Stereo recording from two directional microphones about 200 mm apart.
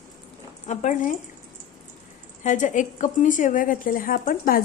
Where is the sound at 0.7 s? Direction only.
35° left (ahead or behind).